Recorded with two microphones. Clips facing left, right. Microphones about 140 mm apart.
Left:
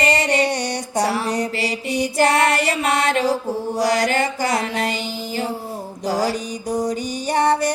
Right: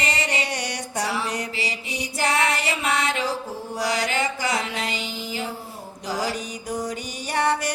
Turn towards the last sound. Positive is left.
turn(degrees=40)  # may be behind; listen again after turning